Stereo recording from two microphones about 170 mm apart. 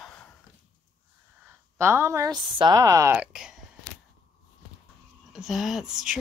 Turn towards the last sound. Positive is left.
turn(degrees=-5)  # may be behind; listen again after turning